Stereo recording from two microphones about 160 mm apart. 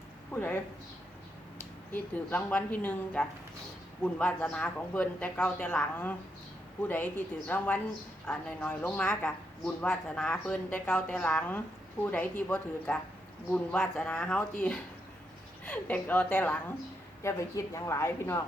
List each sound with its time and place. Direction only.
0.3 s speech: 10° left (ahead or behind)
1.9 s speech: 10° left (ahead or behind)